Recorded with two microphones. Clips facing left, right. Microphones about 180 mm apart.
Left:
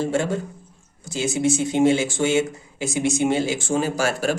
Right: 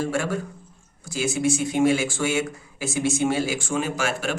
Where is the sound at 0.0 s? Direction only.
20° left (ahead or behind).